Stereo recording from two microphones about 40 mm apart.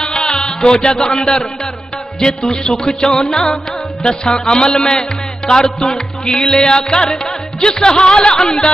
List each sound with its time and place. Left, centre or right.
0.0 s music: centre
0.3 s music: centre
2.1 s music: centre